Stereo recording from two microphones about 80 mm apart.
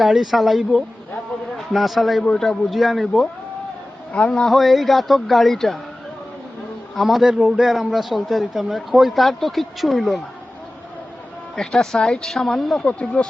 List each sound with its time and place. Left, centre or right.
0.0 s a man's voice: centre
4.1 s speech: centre
4.5 s a man's voice: centre
6.9 s a man's voice: centre
11.5 s speech: centre
12.8 s speech: centre